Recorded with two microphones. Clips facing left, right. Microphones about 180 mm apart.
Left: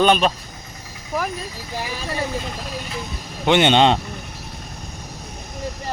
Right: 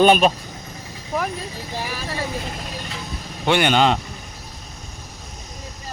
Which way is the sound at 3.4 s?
20° left (ahead or behind).